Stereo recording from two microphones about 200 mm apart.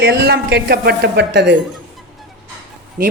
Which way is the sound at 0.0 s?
55° right (ahead or behind).